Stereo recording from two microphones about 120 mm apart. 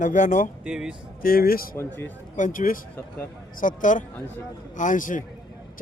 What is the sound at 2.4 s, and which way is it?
Speech, 90° left.